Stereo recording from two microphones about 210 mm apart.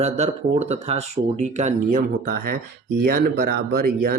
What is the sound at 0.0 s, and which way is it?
Speech, 30° right (ahead or behind).